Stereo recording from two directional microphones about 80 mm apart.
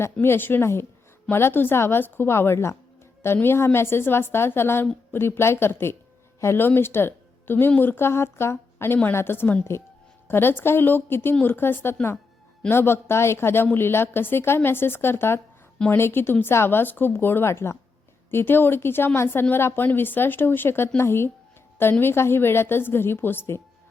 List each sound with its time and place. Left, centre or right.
0.0 s a woman's voice: left